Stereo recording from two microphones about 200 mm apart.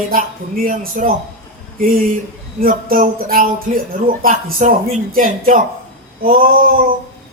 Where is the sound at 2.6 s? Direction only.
45° right (ahead or behind).